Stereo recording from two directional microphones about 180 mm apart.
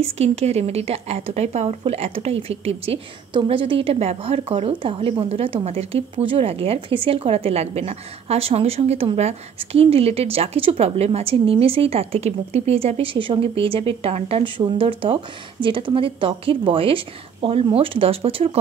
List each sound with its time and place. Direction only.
0.0 s a woman's voice: 35° right (ahead or behind)